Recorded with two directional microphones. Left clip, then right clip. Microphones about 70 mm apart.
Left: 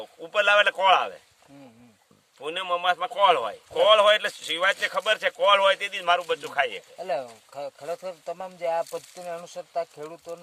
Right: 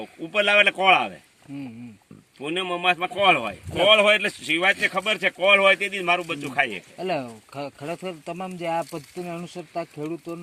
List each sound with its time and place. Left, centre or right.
0.0 s speech: left
2.4 s speech: left
3.1 s speech: left
7.0 s speech: centre; by 9.9 s left
10.0 s speech: centre